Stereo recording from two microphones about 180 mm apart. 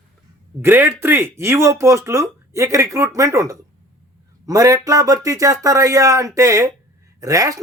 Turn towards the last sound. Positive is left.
turn(degrees=-20)  # may be behind; listen again after turning